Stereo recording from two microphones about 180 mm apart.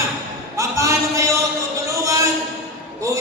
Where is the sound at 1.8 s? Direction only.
15° right (ahead or behind).